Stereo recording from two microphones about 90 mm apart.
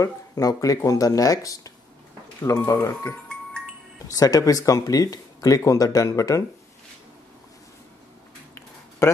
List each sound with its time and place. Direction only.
0.0 s speech: 40° left (ahead or behind)
9.0 s speech: 30° left (ahead or behind)